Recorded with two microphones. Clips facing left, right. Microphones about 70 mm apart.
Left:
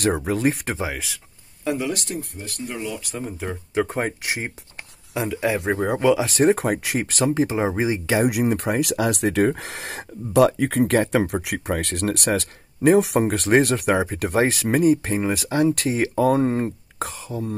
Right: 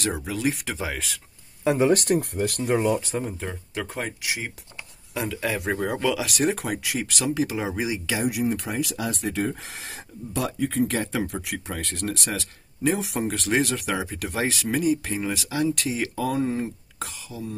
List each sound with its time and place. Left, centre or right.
0.0 s speech: left
0.8 s speech: centre
1.6 s speech: right
2.0 s speech: right
3.7 s speech: left
5.3 s speech: left
8.2 s speech: left